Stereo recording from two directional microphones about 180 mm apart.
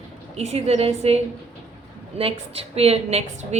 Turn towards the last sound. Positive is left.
turn(degrees=-35)  # may be behind; listen again after turning